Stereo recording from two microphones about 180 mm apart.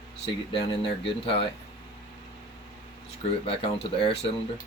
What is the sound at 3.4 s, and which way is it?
Speech, 30° left (ahead or behind).